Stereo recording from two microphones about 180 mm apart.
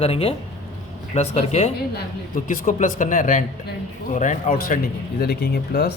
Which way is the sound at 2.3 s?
50° left (ahead or behind).